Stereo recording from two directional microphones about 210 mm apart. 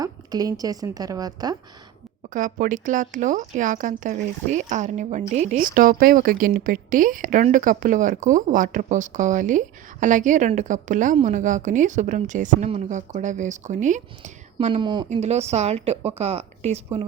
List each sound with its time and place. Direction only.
0.0 s a woman's voice: 15° right (ahead or behind)
2.3 s a woman's voice: 40° right (ahead or behind)